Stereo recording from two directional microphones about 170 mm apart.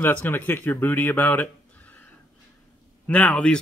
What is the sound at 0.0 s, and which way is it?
Speech, 10° left (ahead or behind).